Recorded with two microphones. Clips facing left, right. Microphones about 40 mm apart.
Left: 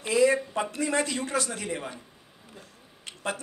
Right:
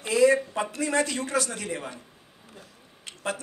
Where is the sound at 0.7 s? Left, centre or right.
Centre.